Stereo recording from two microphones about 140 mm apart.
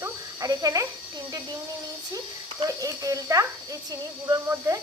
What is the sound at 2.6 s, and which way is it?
Speech, 25° right (ahead or behind).